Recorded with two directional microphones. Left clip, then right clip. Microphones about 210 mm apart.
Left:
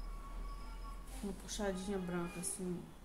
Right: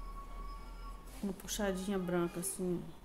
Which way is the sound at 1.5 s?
40° right (ahead or behind).